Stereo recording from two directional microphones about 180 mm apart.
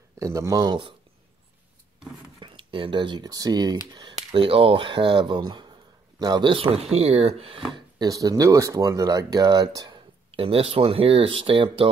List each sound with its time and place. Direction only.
0.2 s speech: 15° right (ahead or behind)
2.4 s speech: 30° right (ahead or behind)
7.7 s speech: 20° right (ahead or behind)